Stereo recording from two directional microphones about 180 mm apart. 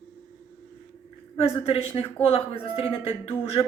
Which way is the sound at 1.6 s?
35° left (ahead or behind).